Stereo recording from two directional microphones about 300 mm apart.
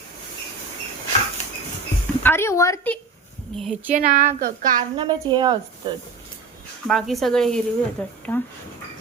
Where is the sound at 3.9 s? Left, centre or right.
Right.